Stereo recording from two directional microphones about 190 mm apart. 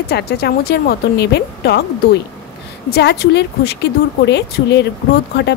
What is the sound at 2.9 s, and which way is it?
A woman's voice, 60° left (ahead or behind).